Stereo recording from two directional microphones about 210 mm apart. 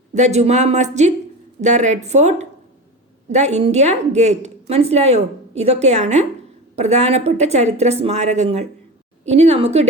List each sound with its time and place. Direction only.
0.1 s a woman's voice: 35° right (ahead or behind)